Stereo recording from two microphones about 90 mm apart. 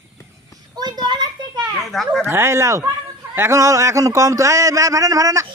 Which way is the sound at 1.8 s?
Centre (ahead or behind).